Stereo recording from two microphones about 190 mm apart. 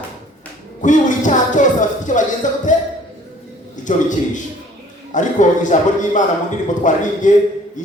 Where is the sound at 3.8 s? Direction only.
40° left (ahead or behind).